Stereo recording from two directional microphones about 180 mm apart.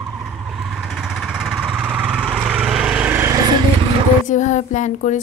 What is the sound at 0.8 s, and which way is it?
Vehicle, centre (ahead or behind).